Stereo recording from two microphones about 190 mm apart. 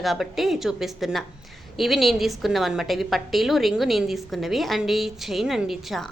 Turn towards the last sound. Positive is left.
turn(degrees=0)  # may be behind; listen again after turning